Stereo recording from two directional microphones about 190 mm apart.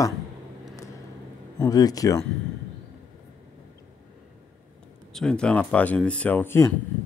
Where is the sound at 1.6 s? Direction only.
20° left (ahead or behind).